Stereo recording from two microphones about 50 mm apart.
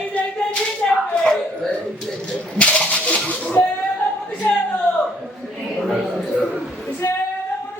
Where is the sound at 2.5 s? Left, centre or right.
Left.